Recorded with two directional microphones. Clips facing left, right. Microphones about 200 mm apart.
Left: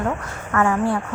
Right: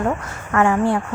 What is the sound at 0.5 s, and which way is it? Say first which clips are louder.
Speech: right 2 dB; 25° right (ahead or behind).